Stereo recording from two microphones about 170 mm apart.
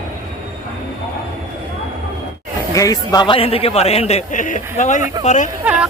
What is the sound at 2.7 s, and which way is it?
A man's voice, 20° left (ahead or behind).